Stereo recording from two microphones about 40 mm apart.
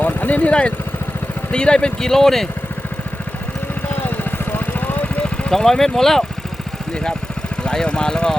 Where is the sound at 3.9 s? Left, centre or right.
Left.